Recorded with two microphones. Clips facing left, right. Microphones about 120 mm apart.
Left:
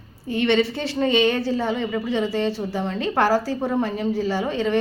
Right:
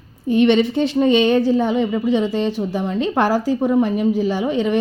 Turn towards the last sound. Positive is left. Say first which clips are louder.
# right 3 dB
turn(degrees=-15)  # may be behind; listen again after turning